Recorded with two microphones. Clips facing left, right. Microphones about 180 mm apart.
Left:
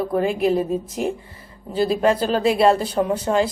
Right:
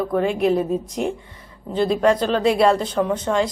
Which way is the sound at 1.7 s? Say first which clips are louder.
Right 1 dB; 5° left (ahead or behind).